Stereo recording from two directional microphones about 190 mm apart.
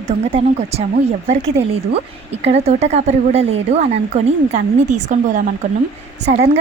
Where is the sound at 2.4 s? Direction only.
35° right (ahead or behind).